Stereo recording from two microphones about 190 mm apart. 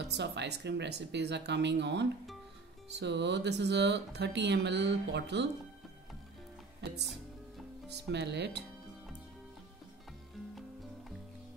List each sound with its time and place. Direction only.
0.1 s speech: 65° right (ahead or behind)
8.1 s speech: 65° right (ahead or behind)